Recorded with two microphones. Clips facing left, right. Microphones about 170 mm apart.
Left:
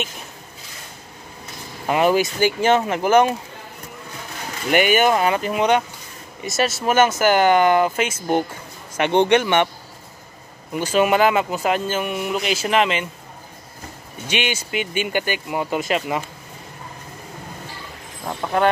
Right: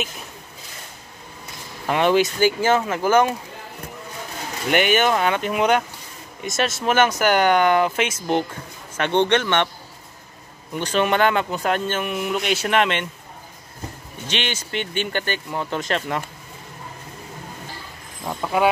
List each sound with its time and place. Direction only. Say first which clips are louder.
1.9 s speech: left 1 dB; 5° left (ahead or behind)
2.6 s speech: left 2 dB; 25° left (ahead or behind)
4.6 s speech: left 2 dB; 5° left (ahead or behind)
10.7 s speech: left 3 dB; 5° left (ahead or behind)
14.2 s speech: left 3 dB; 10° left (ahead or behind)
18.4 s a sound: left 1 dB; 5° right (ahead or behind)